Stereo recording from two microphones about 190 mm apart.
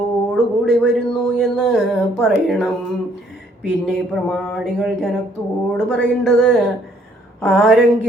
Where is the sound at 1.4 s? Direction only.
Centre (ahead or behind).